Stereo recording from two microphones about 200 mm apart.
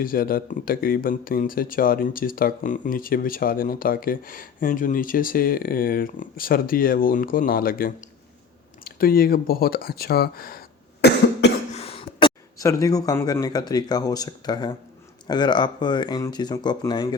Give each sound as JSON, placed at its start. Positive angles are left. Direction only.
{"t": 0.0, "sound": "speech", "side_deg": 45}
{"t": 8.8, "sound": "a sound", "side_deg": 45}
{"t": 11.7, "sound": "speech", "side_deg": 30}